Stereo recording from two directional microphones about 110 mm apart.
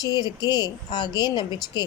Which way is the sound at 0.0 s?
40° left (ahead or behind).